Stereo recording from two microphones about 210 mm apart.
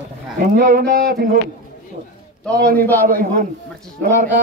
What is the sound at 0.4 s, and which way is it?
Speech, 40° right (ahead or behind).